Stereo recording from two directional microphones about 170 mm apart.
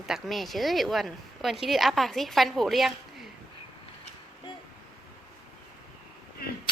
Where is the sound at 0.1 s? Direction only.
Centre (ahead or behind).